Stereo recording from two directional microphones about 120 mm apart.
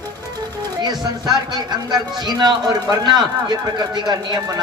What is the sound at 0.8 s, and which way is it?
A man's voice, 35° right (ahead or behind).